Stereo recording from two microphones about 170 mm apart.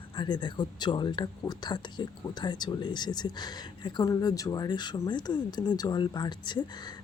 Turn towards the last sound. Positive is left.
turn(degrees=25)  # may be behind; listen again after turning